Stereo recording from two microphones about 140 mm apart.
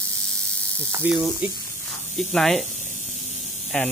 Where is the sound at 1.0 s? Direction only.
5° right (ahead or behind).